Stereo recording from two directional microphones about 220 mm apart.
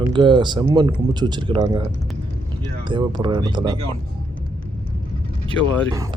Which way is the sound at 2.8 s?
20° right (ahead or behind).